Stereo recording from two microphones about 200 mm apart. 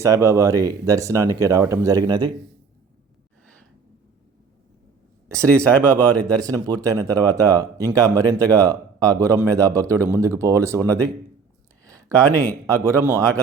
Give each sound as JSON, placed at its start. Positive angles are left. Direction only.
{"t": 0.0, "sound": "speech", "side_deg": -15}
{"t": 3.4, "sound": "gasp", "side_deg": 5}
{"t": 5.5, "sound": "speech", "side_deg": 5}
{"t": 6.2, "sound": "speech", "side_deg": -20}